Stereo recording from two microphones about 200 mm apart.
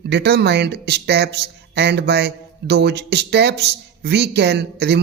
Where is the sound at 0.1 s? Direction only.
55° right (ahead or behind).